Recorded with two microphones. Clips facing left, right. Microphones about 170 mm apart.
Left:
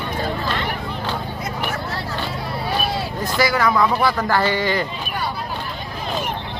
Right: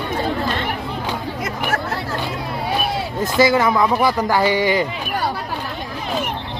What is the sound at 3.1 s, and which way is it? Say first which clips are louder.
Speech: right 5 dB; 20° right (ahead or behind).